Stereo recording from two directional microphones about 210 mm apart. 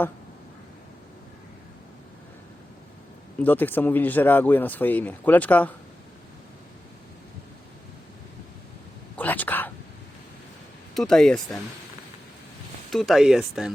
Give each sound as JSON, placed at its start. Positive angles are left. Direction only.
{"t": 3.4, "sound": "speech", "side_deg": 10}
{"t": 9.1, "sound": "whispering", "side_deg": 10}
{"t": 10.9, "sound": "speech", "side_deg": 0}
{"t": 12.9, "sound": "speech", "side_deg": 0}